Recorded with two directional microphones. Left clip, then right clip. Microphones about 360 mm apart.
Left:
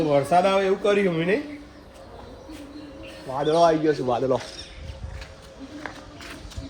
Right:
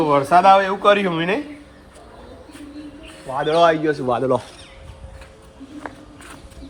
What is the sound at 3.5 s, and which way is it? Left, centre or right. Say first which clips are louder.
Speech: right 3 dB; right.